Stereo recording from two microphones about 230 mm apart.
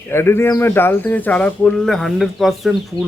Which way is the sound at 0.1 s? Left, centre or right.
Centre.